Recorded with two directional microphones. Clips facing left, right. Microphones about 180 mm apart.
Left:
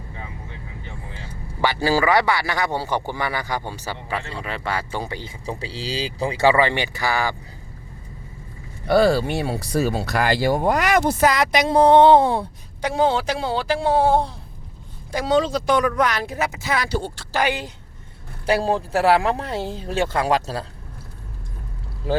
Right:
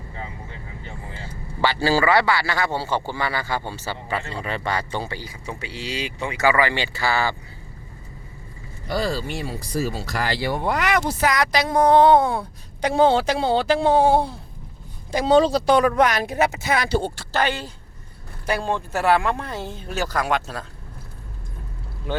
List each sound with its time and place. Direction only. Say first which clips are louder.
1.6 s speech: even; 15° left (ahead or behind)
4.4 s speech: right 1 dB; 5° left (ahead or behind)
8.9 s speech: left 8 dB; 65° left (ahead or behind); by 11.3 s 45° left (ahead or behind)
11.3 s speech: left 2 dB; 20° left (ahead or behind)
12.8 s speech: right 3 dB; 30° right (ahead or behind)
16.4 s speech: right 6 dB; 65° right (ahead or behind)
16.9 s speech: right 3 dB; 25° right (ahead or behind)
17.3 s speech: left 1 dB; 15° left (ahead or behind)
18.4 s speech: left 4 dB; 30° left (ahead or behind)